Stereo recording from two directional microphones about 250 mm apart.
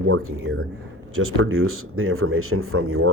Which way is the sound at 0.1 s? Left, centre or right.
Right.